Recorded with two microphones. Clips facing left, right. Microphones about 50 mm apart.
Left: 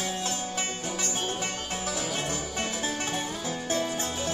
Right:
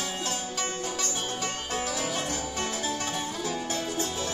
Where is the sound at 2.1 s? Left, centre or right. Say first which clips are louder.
Even; left.